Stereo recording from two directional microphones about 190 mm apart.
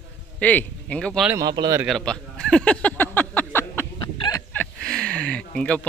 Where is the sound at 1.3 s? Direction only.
20° right (ahead or behind).